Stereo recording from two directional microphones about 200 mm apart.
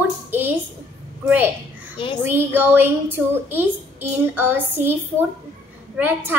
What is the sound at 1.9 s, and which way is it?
Speech, 25° left (ahead or behind).